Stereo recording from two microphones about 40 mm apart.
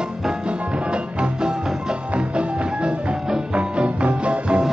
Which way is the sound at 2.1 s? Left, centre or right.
Right.